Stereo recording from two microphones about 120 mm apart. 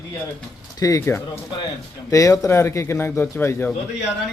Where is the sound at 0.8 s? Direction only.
25° left (ahead or behind).